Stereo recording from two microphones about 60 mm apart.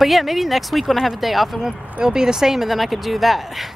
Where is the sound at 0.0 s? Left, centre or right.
Centre.